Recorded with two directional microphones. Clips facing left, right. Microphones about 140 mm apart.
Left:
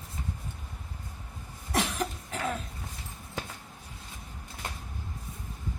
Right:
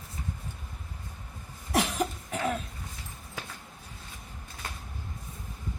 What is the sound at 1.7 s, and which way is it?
Cough, 15° right (ahead or behind).